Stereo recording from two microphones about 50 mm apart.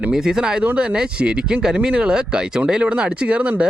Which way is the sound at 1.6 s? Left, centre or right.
Centre.